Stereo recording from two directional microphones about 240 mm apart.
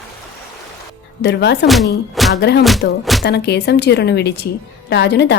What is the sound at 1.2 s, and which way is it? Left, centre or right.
A woman's voice, left.